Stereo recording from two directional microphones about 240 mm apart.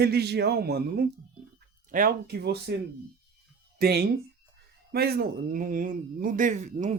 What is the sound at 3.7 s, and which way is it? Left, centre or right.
Speech, right.